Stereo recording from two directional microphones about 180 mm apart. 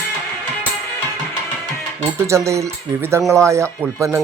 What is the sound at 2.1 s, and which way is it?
Speech, 15° right (ahead or behind).